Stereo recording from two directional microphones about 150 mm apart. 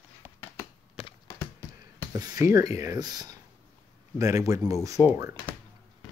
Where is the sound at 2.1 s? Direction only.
20° right (ahead or behind).